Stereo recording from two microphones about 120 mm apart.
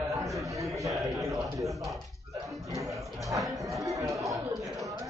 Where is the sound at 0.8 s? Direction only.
25° right (ahead or behind).